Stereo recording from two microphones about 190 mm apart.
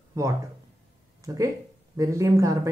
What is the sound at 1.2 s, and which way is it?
Speech, 15° right (ahead or behind).